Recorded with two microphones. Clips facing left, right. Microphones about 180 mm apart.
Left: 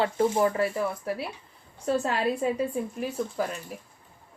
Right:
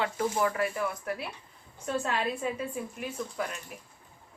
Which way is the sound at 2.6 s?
35° left (ahead or behind).